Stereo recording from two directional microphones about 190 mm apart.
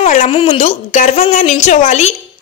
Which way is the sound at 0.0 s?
40° left (ahead or behind).